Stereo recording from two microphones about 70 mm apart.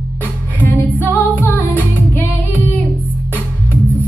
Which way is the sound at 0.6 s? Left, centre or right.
Left.